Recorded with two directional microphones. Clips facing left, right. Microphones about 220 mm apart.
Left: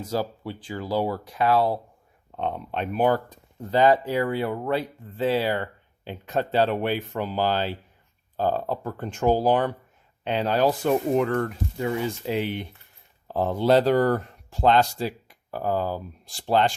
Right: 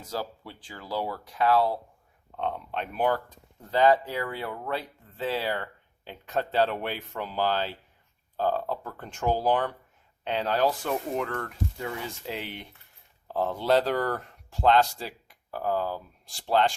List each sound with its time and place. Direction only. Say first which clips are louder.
0.1 s speech: left 6 dB; 20° left (ahead or behind)
8.4 s speech: left 3 dB; 25° left (ahead or behind)
9.3 s speech: left 4 dB; 30° left (ahead or behind)
10.2 s speech: left 4 dB; 15° left (ahead or behind)